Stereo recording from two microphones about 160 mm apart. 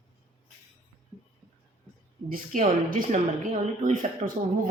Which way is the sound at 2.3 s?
50° right (ahead or behind).